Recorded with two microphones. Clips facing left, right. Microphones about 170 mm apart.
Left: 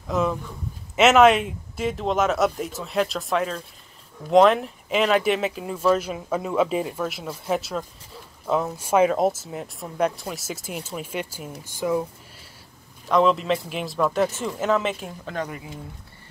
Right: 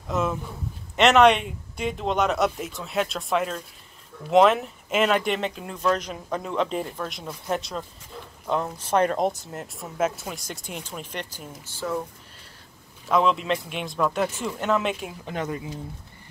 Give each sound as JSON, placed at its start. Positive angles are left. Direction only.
{"t": 0.1, "sound": "speech", "side_deg": 0}
{"t": 13.0, "sound": "speech", "side_deg": 0}
{"t": 15.2, "sound": "speech", "side_deg": -20}